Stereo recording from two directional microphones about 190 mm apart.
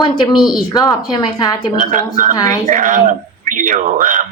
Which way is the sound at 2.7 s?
45° right (ahead or behind).